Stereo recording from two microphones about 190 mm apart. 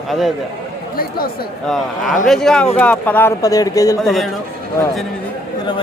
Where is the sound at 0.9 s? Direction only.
50° left (ahead or behind).